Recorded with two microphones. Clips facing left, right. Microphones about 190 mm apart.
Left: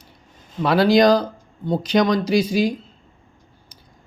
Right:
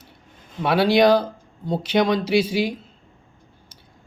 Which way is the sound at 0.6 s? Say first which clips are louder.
Left 2 dB; 5° right (ahead or behind).